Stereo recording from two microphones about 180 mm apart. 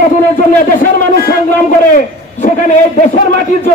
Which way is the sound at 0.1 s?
45° left (ahead or behind).